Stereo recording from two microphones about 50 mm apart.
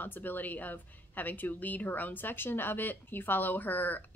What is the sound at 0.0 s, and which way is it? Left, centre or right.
A woman's voice, left.